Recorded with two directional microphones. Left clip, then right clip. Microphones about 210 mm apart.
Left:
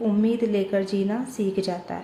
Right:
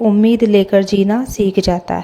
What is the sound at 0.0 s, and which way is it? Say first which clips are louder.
A woman's voice: right 10 dB; 40° right (ahead or behind).